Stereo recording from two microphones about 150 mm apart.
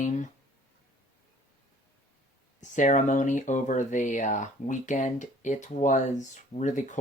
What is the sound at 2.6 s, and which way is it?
Speech, 55° left (ahead or behind).